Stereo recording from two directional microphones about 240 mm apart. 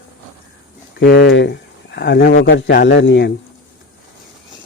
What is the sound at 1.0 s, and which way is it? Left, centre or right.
Speech, left.